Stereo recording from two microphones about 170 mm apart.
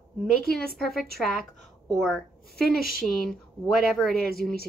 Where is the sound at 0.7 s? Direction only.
Centre (ahead or behind).